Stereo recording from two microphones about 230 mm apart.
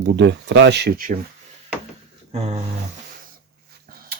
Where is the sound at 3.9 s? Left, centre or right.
Right.